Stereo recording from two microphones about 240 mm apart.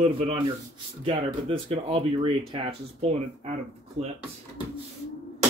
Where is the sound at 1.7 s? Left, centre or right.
Right.